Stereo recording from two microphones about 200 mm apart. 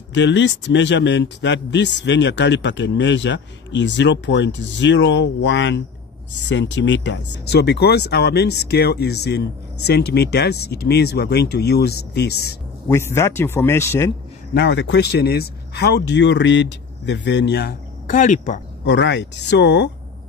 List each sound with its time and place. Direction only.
0.1 s speech: 65° left (ahead or behind)
12.8 s speech: 15° left (ahead or behind)
14.5 s speech: 60° left (ahead or behind); by 18.6 s 40° left (ahead or behind)
18.9 s speech: 60° left (ahead or behind)